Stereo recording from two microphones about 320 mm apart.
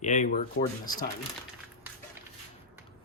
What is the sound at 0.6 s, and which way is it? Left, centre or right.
Speech, left.